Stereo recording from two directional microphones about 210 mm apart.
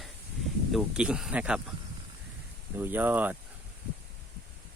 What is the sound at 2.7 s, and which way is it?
Speech, 10° right (ahead or behind).